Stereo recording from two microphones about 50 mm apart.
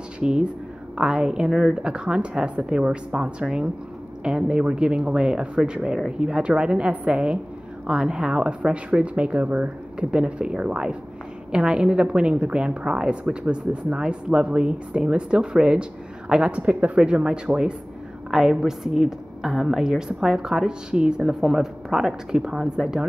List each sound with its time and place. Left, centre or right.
0.2 s a woman's voice: centre